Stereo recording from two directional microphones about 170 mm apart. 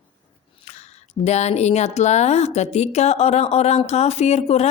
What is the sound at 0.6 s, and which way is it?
A woman's voice, 40° left (ahead or behind).